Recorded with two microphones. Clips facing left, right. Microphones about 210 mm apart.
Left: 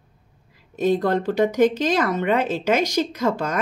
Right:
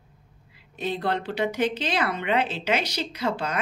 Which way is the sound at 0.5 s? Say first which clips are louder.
Left 10 dB; 45° left (ahead or behind).